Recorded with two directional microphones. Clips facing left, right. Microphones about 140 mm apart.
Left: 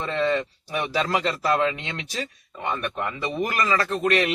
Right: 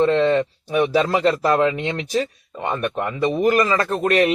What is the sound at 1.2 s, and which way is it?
A man's voice, 45° right (ahead or behind).